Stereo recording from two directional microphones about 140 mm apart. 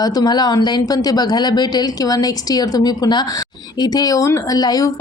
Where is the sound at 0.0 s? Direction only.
30° left (ahead or behind).